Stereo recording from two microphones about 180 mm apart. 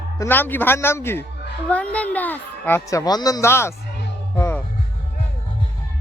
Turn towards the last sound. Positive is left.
turn(degrees=15)  # may be behind; listen again after turning